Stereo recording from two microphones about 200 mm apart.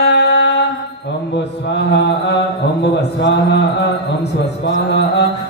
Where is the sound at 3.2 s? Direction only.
60° left (ahead or behind).